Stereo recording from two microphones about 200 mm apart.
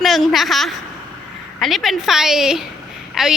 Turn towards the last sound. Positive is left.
turn(degrees=0)  # may be behind; listen again after turning